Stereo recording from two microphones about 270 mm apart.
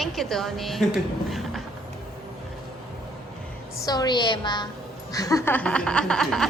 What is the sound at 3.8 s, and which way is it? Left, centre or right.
A woman's voice, centre.